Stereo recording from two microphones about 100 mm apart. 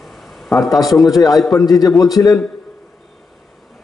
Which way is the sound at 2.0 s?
35° left (ahead or behind).